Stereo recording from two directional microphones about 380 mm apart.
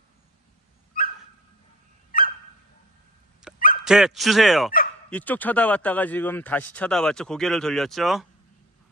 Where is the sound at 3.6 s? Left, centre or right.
Left.